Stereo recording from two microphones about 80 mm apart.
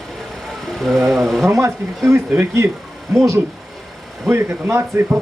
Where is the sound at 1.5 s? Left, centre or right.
Right.